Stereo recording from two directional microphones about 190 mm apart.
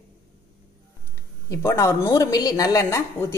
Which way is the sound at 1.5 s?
15° left (ahead or behind).